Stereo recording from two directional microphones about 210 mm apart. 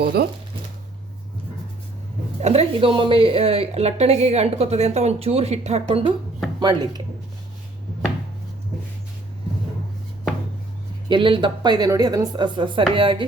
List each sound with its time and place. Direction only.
0.0 s speech: 50° right (ahead or behind)
2.4 s a woman's voice: 30° right (ahead or behind)
11.1 s a woman's voice: 25° right (ahead or behind)